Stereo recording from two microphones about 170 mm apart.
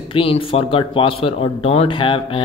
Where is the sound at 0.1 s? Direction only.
30° left (ahead or behind).